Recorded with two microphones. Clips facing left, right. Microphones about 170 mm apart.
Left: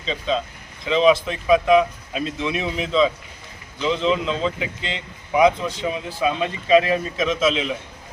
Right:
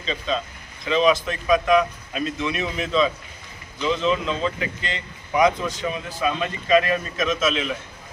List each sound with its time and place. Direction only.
0.0 s speech: 20° left (ahead or behind)
1.5 s speech: 10° left (ahead or behind)
2.2 s speech: 20° left (ahead or behind)
5.6 s speech: 25° left (ahead or behind)